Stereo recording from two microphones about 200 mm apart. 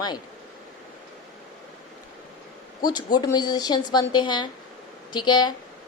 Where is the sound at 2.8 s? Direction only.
20° left (ahead or behind).